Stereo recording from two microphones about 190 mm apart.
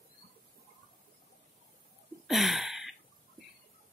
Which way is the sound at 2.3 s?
Centre (ahead or behind).